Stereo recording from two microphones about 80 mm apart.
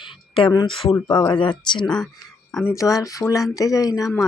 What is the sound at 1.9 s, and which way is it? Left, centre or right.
Speech, centre.